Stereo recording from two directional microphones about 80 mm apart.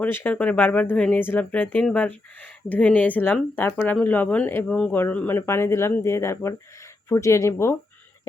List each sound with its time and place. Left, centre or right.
0.0 s speech: left
0.3 s speech: centre
1.2 s speech: left
5.5 s speech: left